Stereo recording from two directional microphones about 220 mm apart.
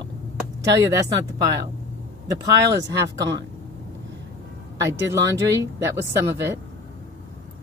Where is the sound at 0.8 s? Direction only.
15° right (ahead or behind).